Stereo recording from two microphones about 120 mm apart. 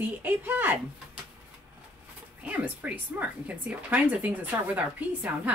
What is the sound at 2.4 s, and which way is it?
Speech, 15° right (ahead or behind).